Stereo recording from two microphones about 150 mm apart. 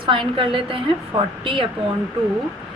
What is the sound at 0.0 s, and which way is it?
A woman's voice, 35° right (ahead or behind).